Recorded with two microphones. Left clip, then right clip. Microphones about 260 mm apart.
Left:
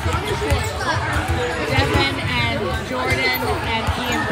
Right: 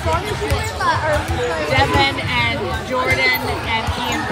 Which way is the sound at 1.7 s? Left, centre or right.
Right.